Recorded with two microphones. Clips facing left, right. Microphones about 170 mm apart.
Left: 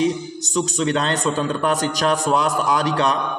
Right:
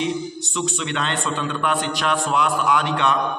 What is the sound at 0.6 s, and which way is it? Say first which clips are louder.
A man's voice: left 5 dB; 40° left (ahead or behind).